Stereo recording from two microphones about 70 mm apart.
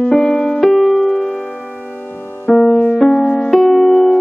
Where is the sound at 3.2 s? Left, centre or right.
Left.